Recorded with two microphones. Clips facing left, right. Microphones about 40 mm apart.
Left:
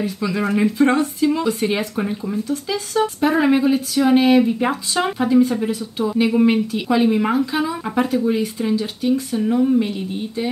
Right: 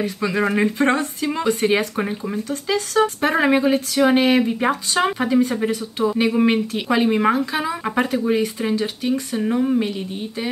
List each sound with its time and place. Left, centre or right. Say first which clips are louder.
0.0 s speech: right 1 dB; right
1.5 s speech: right 2 dB; right
2.4 s speech: right 1 dB; right
3.3 s speech: even; right
9.4 s speech: left 2 dB; centre